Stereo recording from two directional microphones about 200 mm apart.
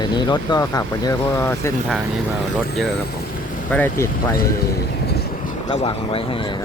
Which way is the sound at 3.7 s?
10° left (ahead or behind).